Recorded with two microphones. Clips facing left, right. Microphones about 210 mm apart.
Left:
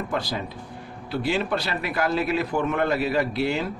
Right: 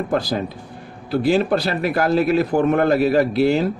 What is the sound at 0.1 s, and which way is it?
A man's voice, 40° right (ahead or behind).